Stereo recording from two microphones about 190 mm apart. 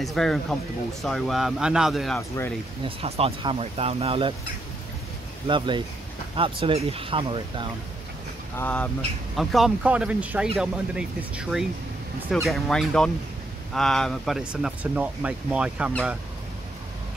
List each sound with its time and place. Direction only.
0.0 s speech: centre (ahead or behind)
2.8 s speech: 30° right (ahead or behind)
5.5 s speech: 25° right (ahead or behind)
8.5 s speech: 10° left (ahead or behind)